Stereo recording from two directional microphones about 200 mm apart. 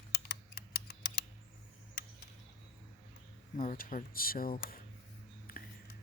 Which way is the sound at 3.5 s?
40° left (ahead or behind).